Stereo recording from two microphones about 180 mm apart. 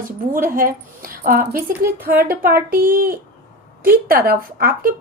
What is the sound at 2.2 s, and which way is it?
Speech, 55° right (ahead or behind).